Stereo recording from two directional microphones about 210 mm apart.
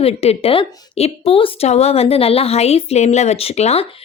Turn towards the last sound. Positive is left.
turn(degrees=30)  # may be behind; listen again after turning